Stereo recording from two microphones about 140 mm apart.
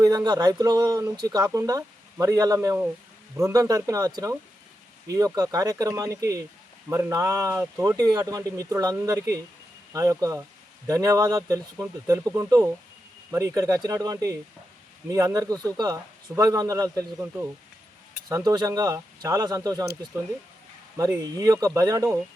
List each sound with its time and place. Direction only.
0.0 s speech: 25° right (ahead or behind)
18.3 s speech: 25° right (ahead or behind)
21.2 s speech: 25° right (ahead or behind)